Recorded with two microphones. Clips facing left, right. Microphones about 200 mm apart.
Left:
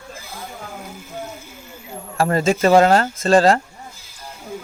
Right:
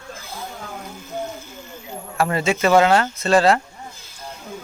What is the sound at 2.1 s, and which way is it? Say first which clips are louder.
Speech: left 3 dB; 40° left (ahead or behind).